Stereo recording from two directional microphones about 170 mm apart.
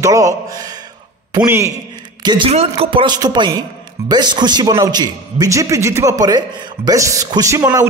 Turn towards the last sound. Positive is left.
turn(degrees=-15)  # may be behind; listen again after turning